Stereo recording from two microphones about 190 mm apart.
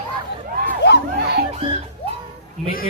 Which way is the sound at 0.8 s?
60° left (ahead or behind).